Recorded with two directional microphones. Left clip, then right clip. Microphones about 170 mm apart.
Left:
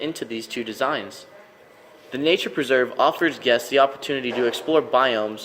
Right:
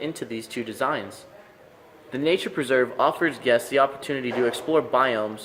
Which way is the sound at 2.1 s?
25° left (ahead or behind).